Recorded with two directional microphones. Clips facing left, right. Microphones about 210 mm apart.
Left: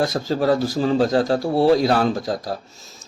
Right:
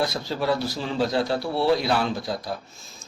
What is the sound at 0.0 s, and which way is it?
A man's voice, 45° left (ahead or behind).